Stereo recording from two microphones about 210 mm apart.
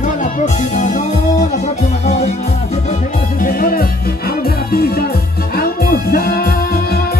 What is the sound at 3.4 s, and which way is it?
Music, 40° left (ahead or behind).